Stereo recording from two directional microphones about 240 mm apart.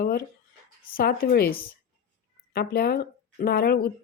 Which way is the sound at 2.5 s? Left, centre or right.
Left.